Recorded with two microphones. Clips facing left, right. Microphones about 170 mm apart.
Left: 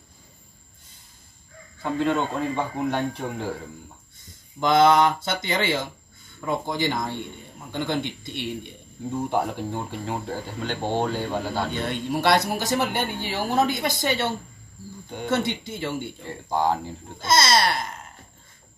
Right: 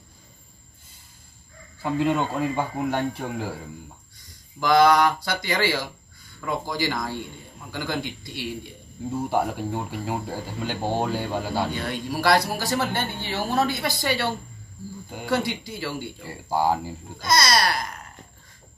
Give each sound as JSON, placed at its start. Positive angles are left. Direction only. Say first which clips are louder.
{"t": 1.8, "sound": "a man's voice", "louder": "right 1 dB", "side_deg": -5}
{"t": 4.2, "sound": "speech", "louder": "left 3 dB", "side_deg": 25}
{"t": 9.1, "sound": "speech", "louder": "right 1 dB", "side_deg": -5}
{"t": 11.7, "sound": "speech", "louder": "left 2 dB", "side_deg": 20}
{"t": 16.3, "sound": "speech", "louder": "right 1 dB", "side_deg": -5}
{"t": 17.2, "sound": "speech", "louder": "left 1 dB", "side_deg": 25}